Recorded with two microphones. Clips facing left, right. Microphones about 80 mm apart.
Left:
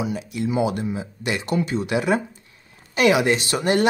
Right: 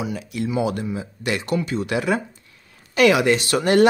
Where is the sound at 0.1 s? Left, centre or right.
Left.